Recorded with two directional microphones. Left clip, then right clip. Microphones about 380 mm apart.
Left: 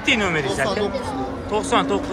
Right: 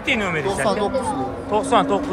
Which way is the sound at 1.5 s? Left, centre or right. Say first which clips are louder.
Right 2 dB; centre.